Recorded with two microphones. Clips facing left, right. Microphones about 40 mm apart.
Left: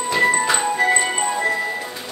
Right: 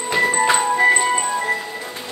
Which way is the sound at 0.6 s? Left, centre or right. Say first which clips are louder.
Right 3 dB; centre.